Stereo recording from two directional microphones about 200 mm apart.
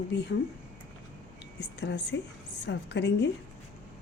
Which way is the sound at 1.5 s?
60° left (ahead or behind).